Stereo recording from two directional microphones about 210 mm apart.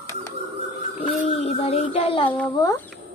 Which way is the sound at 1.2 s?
30° left (ahead or behind).